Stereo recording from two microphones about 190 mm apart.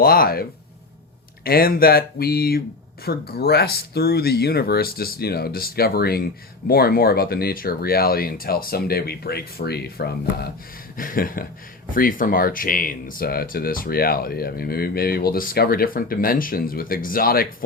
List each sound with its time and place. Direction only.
0.0 s speech: 50° left (ahead or behind)
1.5 s speech: 50° left (ahead or behind)